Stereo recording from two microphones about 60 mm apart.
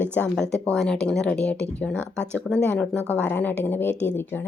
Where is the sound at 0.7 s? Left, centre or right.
Centre.